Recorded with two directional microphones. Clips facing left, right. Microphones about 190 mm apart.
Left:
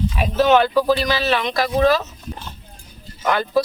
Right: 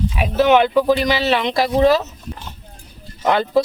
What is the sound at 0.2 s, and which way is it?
Speech, 15° right (ahead or behind).